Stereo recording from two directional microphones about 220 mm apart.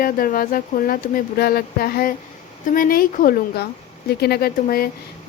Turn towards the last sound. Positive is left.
turn(degrees=45)  # may be behind; listen again after turning